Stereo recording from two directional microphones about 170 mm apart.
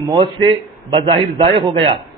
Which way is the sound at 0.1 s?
25° right (ahead or behind).